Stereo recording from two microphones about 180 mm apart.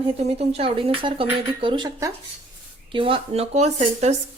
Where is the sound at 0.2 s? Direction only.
35° right (ahead or behind).